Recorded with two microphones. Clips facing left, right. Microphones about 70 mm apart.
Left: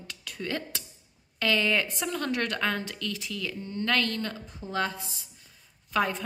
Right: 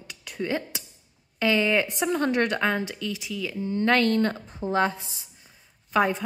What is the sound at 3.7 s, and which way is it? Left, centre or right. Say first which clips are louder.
A woman's voice: right 7 dB; right.